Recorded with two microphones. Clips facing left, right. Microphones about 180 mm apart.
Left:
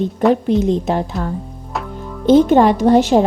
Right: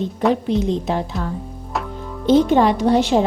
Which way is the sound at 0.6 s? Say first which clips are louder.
Left 4 dB; 50° left (ahead or behind).